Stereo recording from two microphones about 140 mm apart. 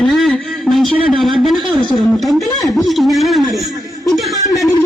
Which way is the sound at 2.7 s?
Centre (ahead or behind).